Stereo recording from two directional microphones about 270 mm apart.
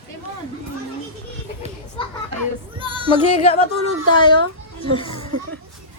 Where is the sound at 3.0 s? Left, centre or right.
Centre.